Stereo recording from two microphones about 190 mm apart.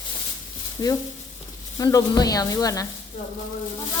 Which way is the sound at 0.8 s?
20° left (ahead or behind).